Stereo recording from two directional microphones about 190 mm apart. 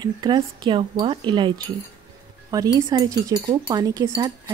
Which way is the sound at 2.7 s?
20° right (ahead or behind).